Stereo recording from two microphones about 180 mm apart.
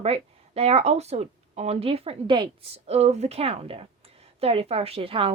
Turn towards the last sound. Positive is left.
turn(degrees=-30)  # may be behind; listen again after turning